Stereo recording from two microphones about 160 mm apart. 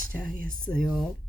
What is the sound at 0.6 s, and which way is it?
Speech, 5° left (ahead or behind).